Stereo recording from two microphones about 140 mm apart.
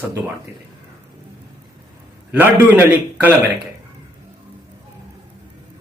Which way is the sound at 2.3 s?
15° right (ahead or behind).